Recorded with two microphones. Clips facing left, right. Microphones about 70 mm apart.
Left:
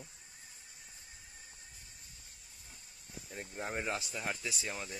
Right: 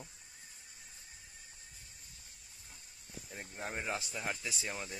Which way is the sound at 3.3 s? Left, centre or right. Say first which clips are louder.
Left 2 dB; centre.